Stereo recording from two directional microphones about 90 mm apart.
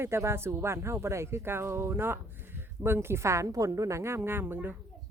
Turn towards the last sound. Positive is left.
turn(degrees=-25)  # may be behind; listen again after turning